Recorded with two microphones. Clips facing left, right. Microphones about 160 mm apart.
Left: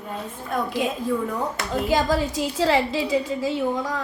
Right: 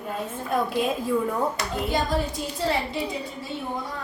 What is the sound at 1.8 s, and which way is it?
A woman's voice, 90° left.